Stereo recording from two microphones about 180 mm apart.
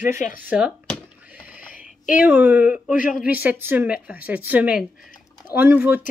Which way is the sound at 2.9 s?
50° left (ahead or behind).